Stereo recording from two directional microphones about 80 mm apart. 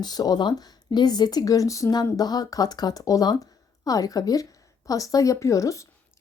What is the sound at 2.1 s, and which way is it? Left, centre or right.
Speech, left.